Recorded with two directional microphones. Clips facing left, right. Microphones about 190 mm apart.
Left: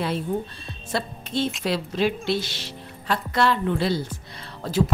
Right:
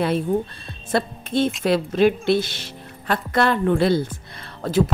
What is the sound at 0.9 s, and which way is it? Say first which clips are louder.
A woman's voice: right 5 dB; 55° right (ahead or behind).